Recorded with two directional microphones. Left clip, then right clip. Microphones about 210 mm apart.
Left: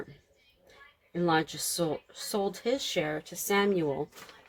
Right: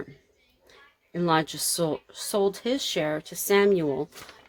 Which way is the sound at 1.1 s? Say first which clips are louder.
Right 3 dB; 45° right (ahead or behind).